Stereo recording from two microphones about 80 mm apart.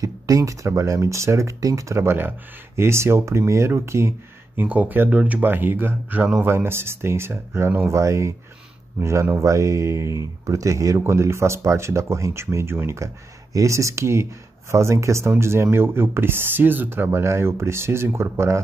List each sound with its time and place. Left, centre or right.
0.0 s speech: right
4.6 s speech: right